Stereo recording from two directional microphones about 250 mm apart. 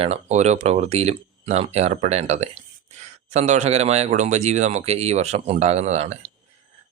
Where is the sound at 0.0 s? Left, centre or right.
Right.